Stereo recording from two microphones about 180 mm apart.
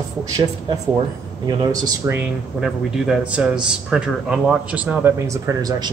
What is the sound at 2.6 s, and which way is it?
A man's voice, centre (ahead or behind).